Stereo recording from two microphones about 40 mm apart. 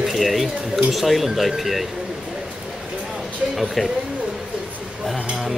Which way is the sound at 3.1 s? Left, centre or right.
Centre.